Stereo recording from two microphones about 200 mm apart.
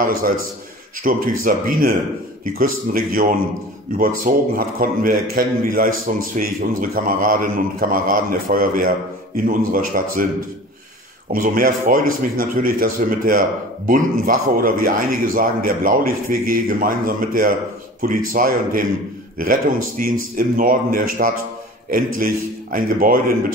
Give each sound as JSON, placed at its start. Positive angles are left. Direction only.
{"t": 0.0, "sound": "a man's voice", "side_deg": -45}
{"t": 11.3, "sound": "a man's voice", "side_deg": -45}